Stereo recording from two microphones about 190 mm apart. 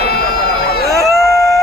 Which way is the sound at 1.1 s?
Centre (ahead or behind).